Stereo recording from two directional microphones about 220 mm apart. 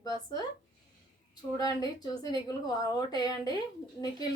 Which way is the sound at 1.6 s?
15° left (ahead or behind).